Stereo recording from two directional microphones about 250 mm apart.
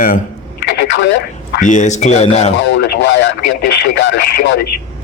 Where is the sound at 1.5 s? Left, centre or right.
Left.